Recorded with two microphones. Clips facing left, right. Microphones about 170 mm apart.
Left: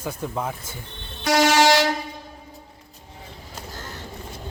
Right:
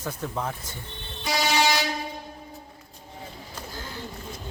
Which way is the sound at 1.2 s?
85° left.